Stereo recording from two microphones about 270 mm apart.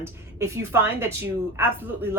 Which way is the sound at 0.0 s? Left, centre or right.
Centre.